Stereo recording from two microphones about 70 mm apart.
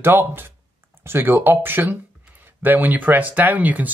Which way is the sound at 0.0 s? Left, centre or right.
Right.